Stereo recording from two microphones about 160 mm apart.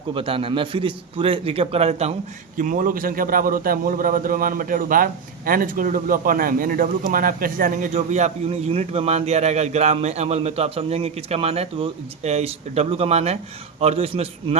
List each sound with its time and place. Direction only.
0.1 s a man's voice: 35° right (ahead or behind)
2.6 s a man's voice: 55° right (ahead or behind); by 14.6 s 35° right (ahead or behind)